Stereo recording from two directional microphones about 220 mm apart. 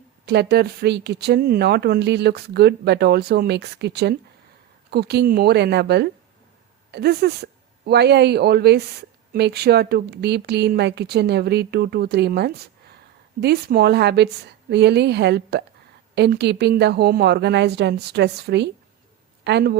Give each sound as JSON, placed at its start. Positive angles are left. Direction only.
{"t": 0.3, "sound": "speech", "side_deg": -50}